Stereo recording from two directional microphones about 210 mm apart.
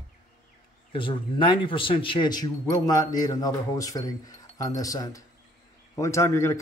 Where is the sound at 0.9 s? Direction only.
25° left (ahead or behind).